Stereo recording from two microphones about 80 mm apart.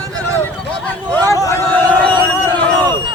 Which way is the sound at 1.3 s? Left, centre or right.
Left.